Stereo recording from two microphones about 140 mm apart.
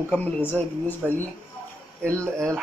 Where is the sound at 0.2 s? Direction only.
15° left (ahead or behind).